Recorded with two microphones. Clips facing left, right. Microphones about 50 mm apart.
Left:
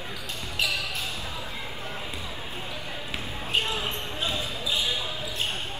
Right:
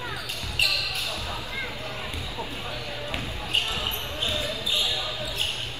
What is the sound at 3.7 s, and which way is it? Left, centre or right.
Basketball bounce, left.